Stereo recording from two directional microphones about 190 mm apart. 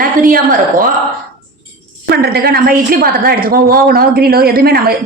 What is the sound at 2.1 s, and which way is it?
A woman's voice, 55° right (ahead or behind).